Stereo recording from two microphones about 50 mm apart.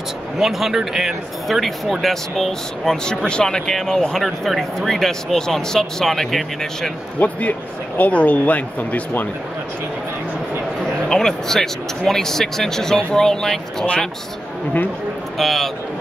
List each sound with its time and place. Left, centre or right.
0.4 s speech: centre
7.2 s speech: left
11.1 s speech: centre
15.3 s speech: centre